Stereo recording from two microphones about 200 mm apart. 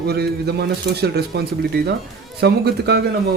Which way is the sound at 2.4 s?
55° right (ahead or behind).